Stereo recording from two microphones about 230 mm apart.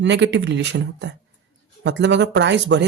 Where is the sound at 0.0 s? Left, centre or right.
Right.